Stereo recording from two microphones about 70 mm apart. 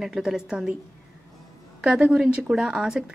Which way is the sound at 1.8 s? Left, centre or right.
Centre.